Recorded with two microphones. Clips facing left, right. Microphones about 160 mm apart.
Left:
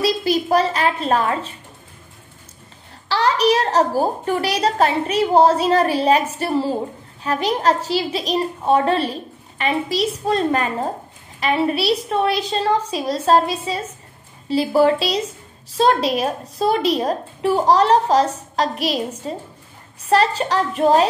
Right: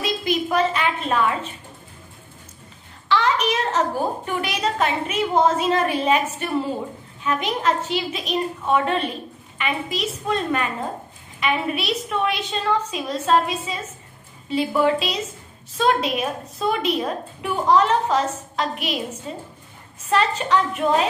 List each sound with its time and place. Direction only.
0.0 s a woman's voice: 35° left (ahead or behind)
3.1 s a woman's voice: 35° left (ahead or behind)